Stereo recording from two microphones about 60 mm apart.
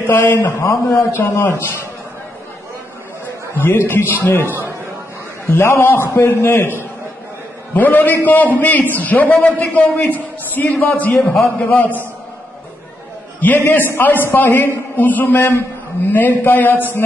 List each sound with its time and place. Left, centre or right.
0.0 s a man's voice: left
3.5 s a man's voice: left
5.6 s a man's voice: left
7.7 s a man's voice: left
13.4 s a man's voice: left